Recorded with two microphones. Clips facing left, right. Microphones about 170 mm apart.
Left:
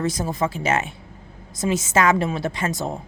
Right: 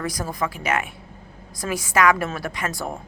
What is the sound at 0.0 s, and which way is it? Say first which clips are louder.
A woman's voice: left 3 dB; 25° left (ahead or behind).